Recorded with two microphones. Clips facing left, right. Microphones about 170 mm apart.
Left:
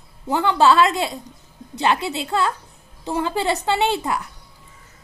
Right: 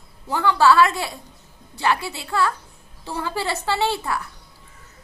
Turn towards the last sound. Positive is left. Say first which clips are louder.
# left 2 dB
turn(degrees=20)  # may be behind; listen again after turning